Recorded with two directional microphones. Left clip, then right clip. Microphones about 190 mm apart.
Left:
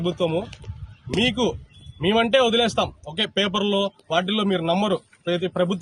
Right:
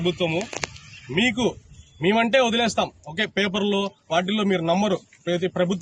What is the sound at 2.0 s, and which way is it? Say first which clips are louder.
A man's voice: left 1 dB; 5° left (ahead or behind).